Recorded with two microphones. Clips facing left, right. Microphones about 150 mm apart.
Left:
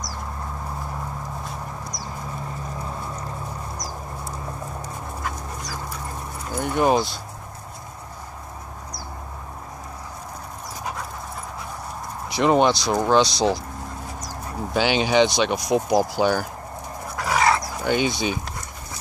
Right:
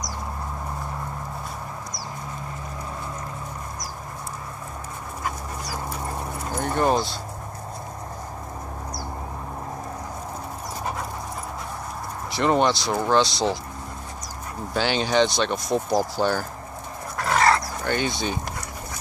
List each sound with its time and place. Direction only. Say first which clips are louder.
6.5 s speech: left 2 dB; 10° left (ahead or behind)
12.3 s speech: left 3 dB; 15° left (ahead or behind)
14.7 s speech: left 3 dB; 15° left (ahead or behind)
17.2 s dog: even; 5° left (ahead or behind)